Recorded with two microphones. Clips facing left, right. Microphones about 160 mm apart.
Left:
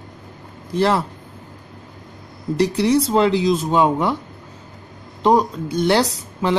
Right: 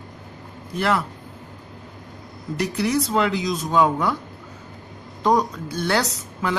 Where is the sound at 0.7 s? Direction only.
30° left (ahead or behind).